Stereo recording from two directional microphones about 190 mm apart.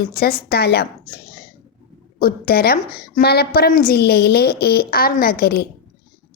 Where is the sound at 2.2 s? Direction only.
50° left (ahead or behind).